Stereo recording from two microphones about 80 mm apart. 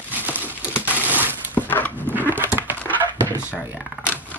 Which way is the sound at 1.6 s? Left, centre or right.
Left.